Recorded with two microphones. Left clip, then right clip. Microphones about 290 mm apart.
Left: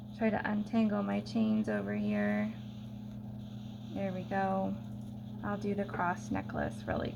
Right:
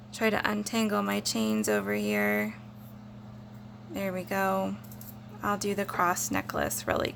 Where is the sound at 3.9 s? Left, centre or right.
Right.